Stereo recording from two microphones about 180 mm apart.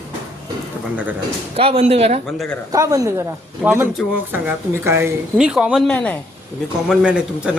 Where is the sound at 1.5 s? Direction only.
30° right (ahead or behind).